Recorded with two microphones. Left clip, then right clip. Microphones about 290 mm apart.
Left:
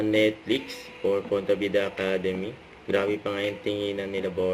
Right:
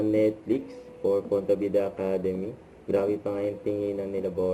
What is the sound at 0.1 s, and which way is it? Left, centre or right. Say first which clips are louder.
Speech: left 3 dB; left.